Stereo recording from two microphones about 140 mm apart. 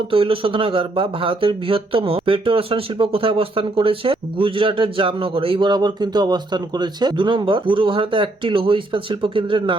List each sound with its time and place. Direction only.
0.1 s speech: 40° right (ahead or behind)